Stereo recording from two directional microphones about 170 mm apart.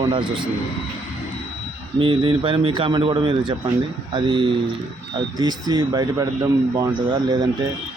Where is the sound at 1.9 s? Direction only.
30° right (ahead or behind).